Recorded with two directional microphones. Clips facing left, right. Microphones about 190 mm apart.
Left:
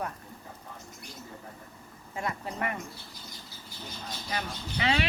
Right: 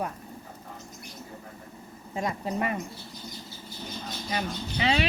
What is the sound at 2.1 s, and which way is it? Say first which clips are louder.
Speech: right 5 dB; 20° right (ahead or behind).